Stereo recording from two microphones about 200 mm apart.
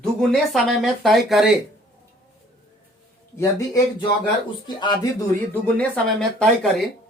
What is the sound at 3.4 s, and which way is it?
Speech, 15° left (ahead or behind).